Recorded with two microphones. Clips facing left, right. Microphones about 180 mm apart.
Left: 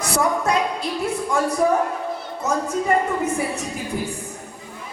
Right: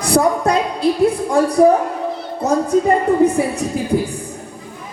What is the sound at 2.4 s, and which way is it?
A woman's voice, 35° right (ahead or behind).